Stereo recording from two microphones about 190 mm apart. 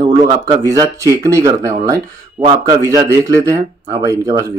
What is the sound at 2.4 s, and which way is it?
Speech, 25° right (ahead or behind).